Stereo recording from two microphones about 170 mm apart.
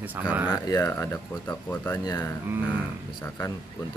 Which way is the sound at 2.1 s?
20° left (ahead or behind).